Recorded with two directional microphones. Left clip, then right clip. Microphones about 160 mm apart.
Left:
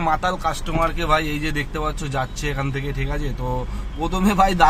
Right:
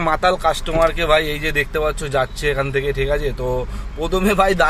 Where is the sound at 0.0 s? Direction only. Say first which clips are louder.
Right 4 dB; 20° right (ahead or behind).